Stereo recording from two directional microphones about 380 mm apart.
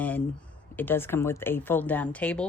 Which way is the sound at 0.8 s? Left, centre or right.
Centre.